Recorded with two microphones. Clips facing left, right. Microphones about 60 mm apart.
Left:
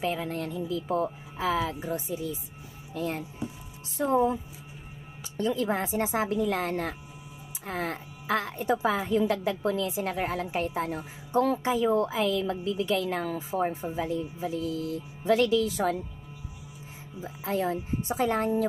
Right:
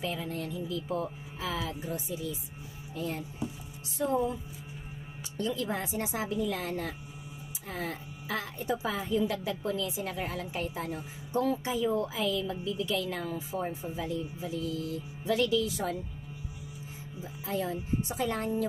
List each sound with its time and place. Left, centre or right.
0.0 s a woman's voice: left
17.2 s speech: left